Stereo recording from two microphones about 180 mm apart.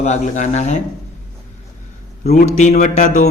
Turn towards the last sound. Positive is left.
turn(degrees=40)  # may be behind; listen again after turning